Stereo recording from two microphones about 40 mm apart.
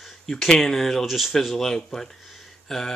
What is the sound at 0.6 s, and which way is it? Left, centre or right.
Speech, centre.